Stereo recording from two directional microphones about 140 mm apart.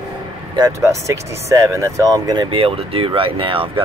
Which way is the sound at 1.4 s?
20° right (ahead or behind).